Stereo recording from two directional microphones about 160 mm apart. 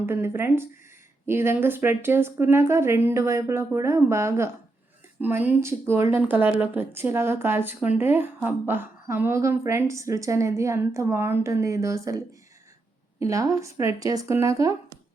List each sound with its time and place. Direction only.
0.0 s a woman's voice: 15° right (ahead or behind)